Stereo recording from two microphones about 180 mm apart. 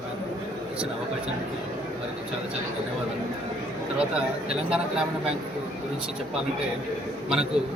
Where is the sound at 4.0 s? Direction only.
5° right (ahead or behind).